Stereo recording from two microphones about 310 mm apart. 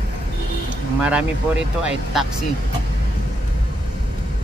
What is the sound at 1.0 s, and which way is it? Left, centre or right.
Speech, centre.